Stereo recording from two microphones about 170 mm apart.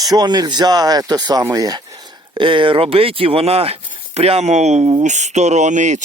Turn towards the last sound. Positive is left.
turn(degrees=-45)  # may be behind; listen again after turning